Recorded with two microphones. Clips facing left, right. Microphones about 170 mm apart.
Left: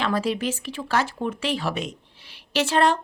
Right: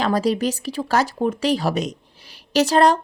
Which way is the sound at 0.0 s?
40° right (ahead or behind).